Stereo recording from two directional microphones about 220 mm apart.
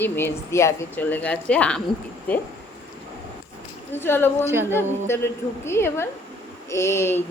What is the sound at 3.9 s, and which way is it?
A woman's voice, 10° left (ahead or behind).